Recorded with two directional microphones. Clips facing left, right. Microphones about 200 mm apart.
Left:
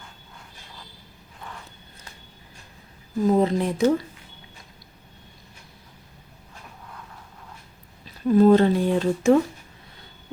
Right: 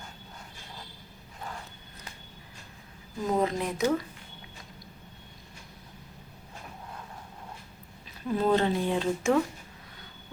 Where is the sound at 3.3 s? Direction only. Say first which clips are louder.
Left 7 dB; 30° left (ahead or behind).